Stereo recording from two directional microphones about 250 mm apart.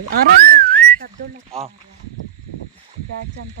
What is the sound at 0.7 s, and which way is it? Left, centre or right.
Whistling, centre.